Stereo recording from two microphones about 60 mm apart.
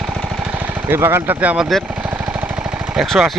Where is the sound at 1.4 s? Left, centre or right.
Centre.